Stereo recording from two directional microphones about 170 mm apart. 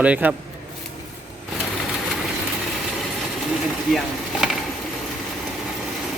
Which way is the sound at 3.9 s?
5° right (ahead or behind).